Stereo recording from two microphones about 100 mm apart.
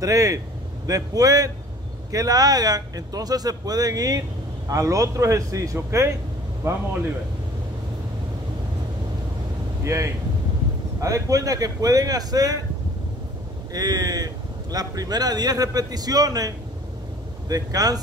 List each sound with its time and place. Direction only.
0.0 s a man's voice: 35° right (ahead or behind)
9.8 s a man's voice: 30° right (ahead or behind)
13.7 s a man's voice: 40° right (ahead or behind)